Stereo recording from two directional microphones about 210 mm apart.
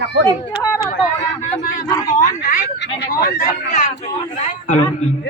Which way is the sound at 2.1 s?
35° left (ahead or behind).